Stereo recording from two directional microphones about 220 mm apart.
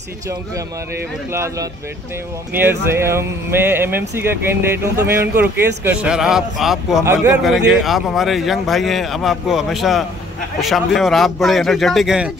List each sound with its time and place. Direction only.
1.3 s speech: 10° right (ahead or behind)